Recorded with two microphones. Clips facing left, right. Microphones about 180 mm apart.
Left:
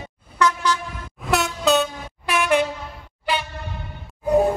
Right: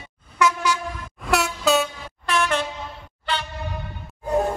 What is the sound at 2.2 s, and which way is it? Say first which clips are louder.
Air horn: left 3 dB; 15° left (ahead or behind).